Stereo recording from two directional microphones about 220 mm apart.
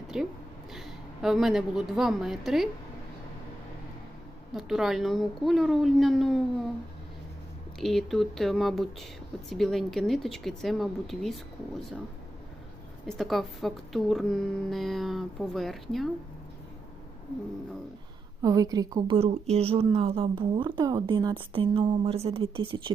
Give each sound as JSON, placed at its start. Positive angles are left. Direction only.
{"t": 0.1, "sound": "a woman's voice", "side_deg": 0}
{"t": 4.5, "sound": "speech", "side_deg": 0}
{"t": 7.8, "sound": "speech", "side_deg": 0}
{"t": 13.1, "sound": "speech", "side_deg": 0}
{"t": 18.4, "sound": "a woman's voice", "side_deg": -15}